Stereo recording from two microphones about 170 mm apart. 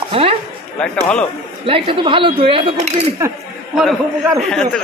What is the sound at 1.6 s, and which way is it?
Speech, 30° right (ahead or behind).